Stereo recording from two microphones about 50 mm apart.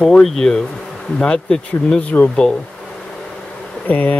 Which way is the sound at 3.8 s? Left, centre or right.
Left.